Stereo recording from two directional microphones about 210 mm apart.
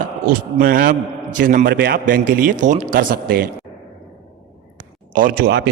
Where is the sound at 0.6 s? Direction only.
45° right (ahead or behind).